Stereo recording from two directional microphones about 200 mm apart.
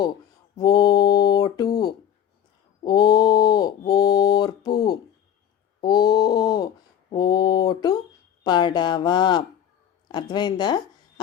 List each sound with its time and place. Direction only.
0.5 s speech: 20° left (ahead or behind)
2.8 s mantra: 20° left (ahead or behind)
5.8 s a sound: 20° left (ahead or behind)
8.4 s speech: 20° left (ahead or behind)